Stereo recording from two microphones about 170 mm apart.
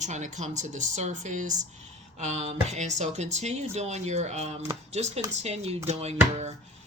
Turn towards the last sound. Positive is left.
turn(degrees=-40)  # may be behind; listen again after turning